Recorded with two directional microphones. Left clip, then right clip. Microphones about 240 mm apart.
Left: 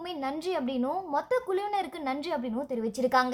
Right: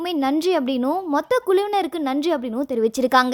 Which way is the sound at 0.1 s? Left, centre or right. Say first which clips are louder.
Right 11 dB; right.